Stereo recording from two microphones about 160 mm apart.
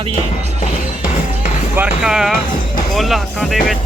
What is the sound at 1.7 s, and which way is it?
Speech, 5° right (ahead or behind).